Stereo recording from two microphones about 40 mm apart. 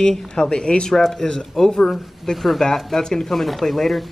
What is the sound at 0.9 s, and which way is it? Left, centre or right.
Speech, centre.